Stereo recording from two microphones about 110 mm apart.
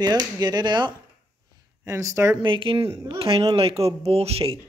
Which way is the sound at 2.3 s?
50° right (ahead or behind).